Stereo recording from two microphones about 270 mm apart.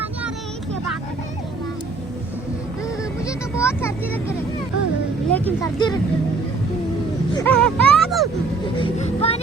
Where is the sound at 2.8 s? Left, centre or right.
Centre.